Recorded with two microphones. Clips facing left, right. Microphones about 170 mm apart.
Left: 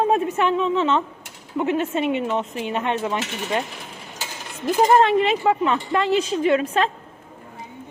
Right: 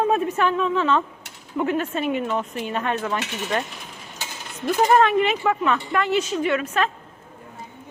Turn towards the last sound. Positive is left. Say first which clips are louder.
# left 3 dB
turn(degrees=30)  # may be behind; listen again after turning